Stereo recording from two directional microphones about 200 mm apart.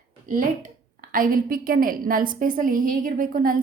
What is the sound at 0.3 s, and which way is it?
A woman's voice, 45° right (ahead or behind).